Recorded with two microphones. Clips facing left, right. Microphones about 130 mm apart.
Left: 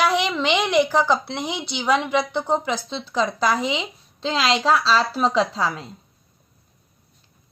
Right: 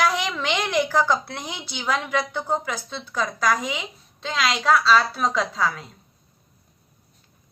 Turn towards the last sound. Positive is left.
turn(degrees=30)  # may be behind; listen again after turning